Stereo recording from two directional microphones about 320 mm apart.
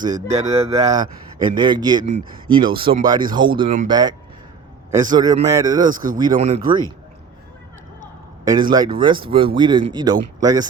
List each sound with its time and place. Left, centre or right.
0.0 s speech: centre
8.4 s speech: centre